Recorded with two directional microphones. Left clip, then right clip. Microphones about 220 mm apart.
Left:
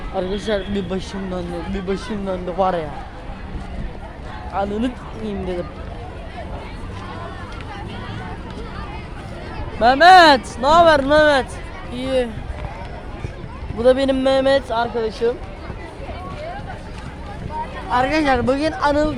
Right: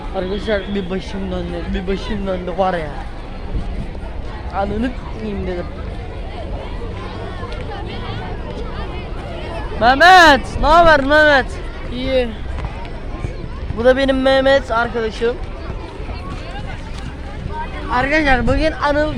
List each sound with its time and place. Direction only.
0.2 s speech: 20° left (ahead or behind)
4.5 s speech: 10° left (ahead or behind)
9.8 s speech: 15° left (ahead or behind)
11.9 s speech: 40° left (ahead or behind)
13.7 s speech: 10° left (ahead or behind)
17.9 s speech: 15° left (ahead or behind)